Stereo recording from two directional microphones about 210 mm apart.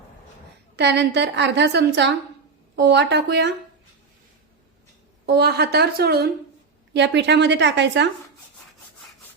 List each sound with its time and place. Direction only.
0.8 s a woman's voice: 55° right (ahead or behind)
5.2 s a woman's voice: 50° right (ahead or behind)